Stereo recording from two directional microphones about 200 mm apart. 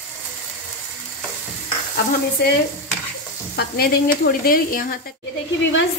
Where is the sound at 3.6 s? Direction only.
50° left (ahead or behind).